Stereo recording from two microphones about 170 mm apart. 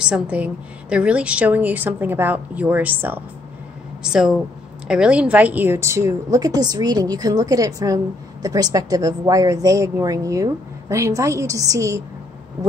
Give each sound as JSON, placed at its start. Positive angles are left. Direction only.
{"t": 0.0, "sound": "a woman's voice", "side_deg": -5}